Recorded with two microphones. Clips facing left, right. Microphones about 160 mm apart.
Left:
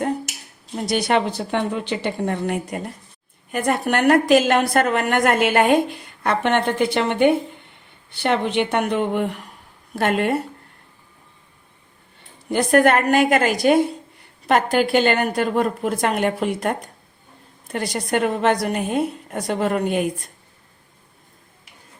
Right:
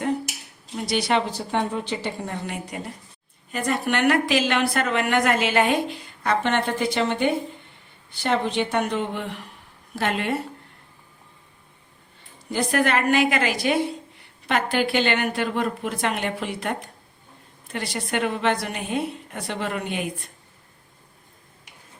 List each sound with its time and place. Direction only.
0.9 s a woman's voice: 50° left (ahead or behind)
1.5 s a woman's voice: 65° left (ahead or behind); by 10.3 s 50° left (ahead or behind)
12.5 s a woman's voice: 55° left (ahead or behind)